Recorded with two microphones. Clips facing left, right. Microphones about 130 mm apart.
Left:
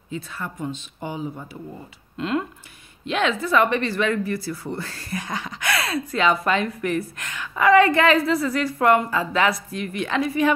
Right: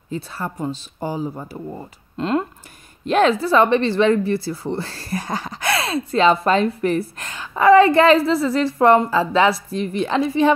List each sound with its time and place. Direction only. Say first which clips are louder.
0.1 s a woman's voice: right 4 dB; 35° right (ahead or behind)